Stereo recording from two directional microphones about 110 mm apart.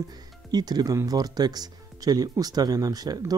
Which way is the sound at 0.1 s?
40° right (ahead or behind).